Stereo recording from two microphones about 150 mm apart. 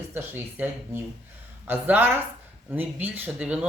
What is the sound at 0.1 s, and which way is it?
Speech, 15° right (ahead or behind).